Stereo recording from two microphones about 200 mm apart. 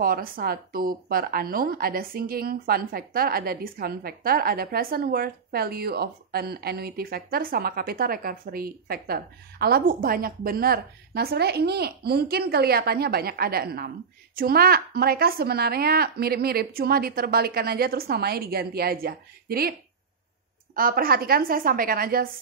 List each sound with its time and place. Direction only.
0.0 s a woman's voice: 45° right (ahead or behind)
20.7 s a woman's voice: 45° right (ahead or behind)